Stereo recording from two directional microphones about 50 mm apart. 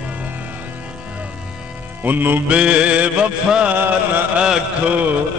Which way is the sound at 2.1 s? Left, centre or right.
Right.